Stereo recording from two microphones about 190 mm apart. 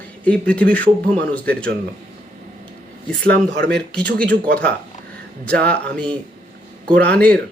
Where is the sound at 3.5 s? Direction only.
65° right (ahead or behind).